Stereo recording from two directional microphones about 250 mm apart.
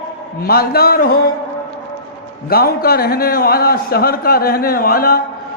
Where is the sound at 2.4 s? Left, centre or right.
Left.